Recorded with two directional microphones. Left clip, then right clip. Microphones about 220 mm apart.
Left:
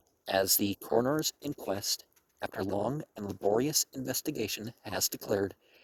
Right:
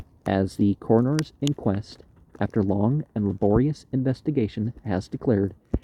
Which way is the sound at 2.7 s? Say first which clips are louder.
Right 7 dB; 60° left (ahead or behind).